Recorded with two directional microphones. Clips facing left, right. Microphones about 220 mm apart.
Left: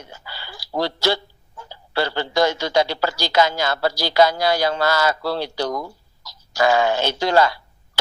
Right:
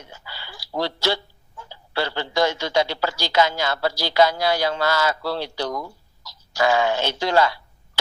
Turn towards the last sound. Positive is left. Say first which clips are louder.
# left 2 dB
turn(degrees=40)  # may be behind; listen again after turning